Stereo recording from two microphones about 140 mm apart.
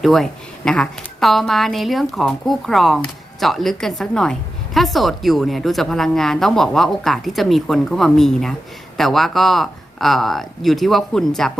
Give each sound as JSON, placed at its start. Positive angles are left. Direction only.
{"t": 0.0, "sound": "a woman's voice", "side_deg": 0}